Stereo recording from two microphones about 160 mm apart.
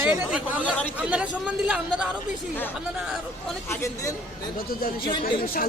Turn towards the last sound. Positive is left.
turn(degrees=30)  # may be behind; listen again after turning